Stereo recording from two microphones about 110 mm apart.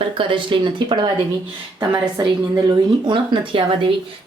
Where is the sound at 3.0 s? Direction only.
45° right (ahead or behind).